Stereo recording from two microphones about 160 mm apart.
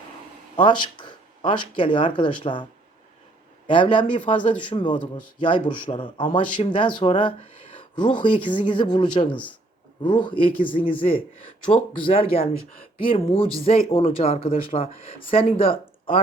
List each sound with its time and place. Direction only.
0.5 s speech: 30° left (ahead or behind)
3.7 s speech: 30° left (ahead or behind)